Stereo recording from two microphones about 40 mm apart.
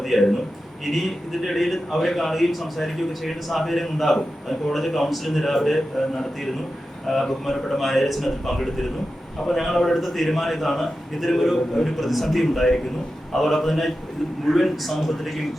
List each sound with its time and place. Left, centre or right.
0.0 s a man's voice: centre